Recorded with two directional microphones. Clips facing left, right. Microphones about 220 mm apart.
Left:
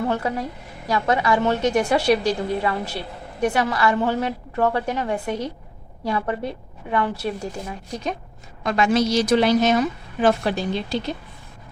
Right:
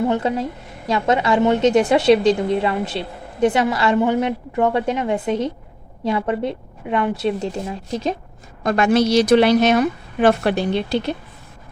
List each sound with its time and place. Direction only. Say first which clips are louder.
0.0 s a woman's voice: right 4 dB; 20° right (ahead or behind)
8.6 s a woman's voice: right 3 dB; 55° right (ahead or behind)